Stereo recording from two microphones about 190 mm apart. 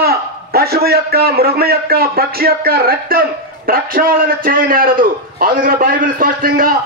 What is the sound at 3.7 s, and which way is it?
A man's voice, 50° right (ahead or behind).